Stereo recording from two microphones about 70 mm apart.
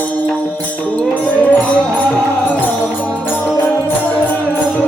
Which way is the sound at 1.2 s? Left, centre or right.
Centre.